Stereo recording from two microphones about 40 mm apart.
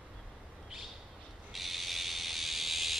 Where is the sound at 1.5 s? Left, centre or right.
Centre.